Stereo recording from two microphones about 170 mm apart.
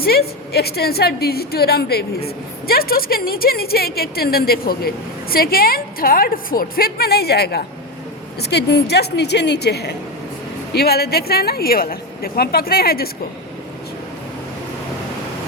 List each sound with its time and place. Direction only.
0.0 s a woman's voice: 65° left (ahead or behind)